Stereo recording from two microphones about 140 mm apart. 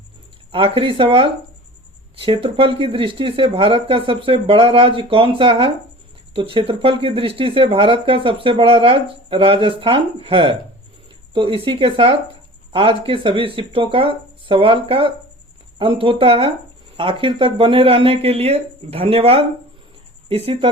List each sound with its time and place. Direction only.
0.5 s speech: 40° right (ahead or behind)